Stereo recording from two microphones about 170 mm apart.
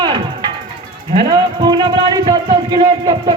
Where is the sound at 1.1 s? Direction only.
30° right (ahead or behind).